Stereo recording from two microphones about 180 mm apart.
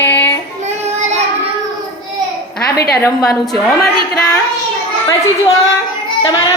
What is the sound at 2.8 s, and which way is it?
Speech, 60° left (ahead or behind).